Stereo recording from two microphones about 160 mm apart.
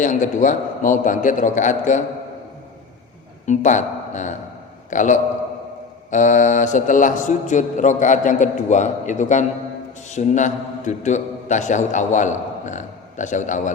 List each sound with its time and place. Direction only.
0.0 s a man's voice: 50° left (ahead or behind)
3.4 s a man's voice: 50° left (ahead or behind)